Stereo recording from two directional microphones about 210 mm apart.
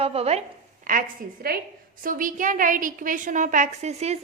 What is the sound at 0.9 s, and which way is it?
A woman's voice, 45° right (ahead or behind).